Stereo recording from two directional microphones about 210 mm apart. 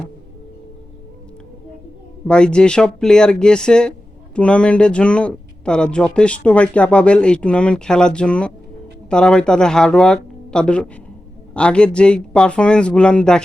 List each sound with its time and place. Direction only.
2.2 s speech: 5° left (ahead or behind)